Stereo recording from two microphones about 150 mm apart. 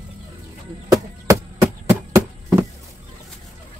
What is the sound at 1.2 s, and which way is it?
Chop, 20° right (ahead or behind).